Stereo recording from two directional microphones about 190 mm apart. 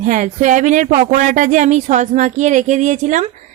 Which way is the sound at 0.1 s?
40° right (ahead or behind).